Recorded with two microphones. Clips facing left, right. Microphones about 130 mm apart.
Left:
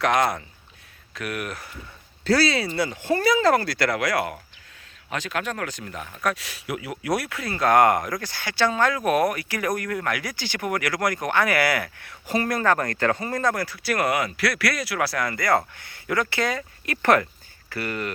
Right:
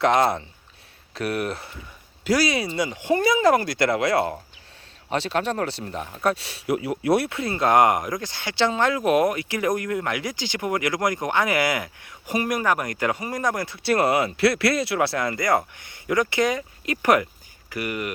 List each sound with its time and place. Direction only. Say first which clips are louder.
0.0 s speech: right 2 dB; 25° right (ahead or behind)
2.2 s speech: left 1 dB; 15° right (ahead or behind)